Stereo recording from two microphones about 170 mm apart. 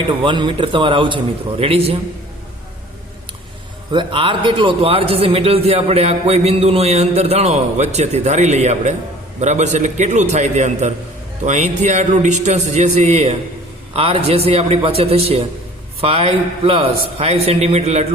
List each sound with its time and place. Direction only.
0.2 s a man's voice: 30° right (ahead or behind)
3.9 s a man's voice: 30° right (ahead or behind)